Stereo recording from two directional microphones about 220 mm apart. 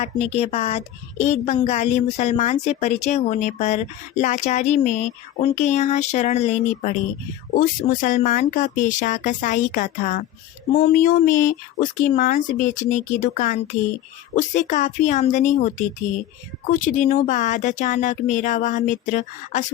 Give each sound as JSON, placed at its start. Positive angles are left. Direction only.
{"t": 0.0, "sound": "speech", "side_deg": 30}
{"t": 16.8, "sound": "speech", "side_deg": 35}